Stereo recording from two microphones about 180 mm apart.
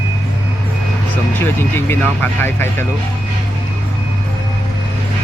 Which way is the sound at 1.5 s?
10° left (ahead or behind).